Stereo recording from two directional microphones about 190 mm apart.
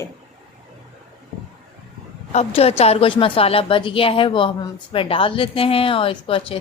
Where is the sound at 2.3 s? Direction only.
30° left (ahead or behind).